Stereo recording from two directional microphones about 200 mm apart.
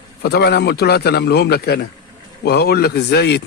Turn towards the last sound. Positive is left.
turn(degrees=55)  # may be behind; listen again after turning